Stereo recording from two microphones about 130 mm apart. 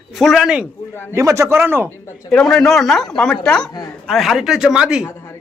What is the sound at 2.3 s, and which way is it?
A man's voice, 5° left (ahead or behind).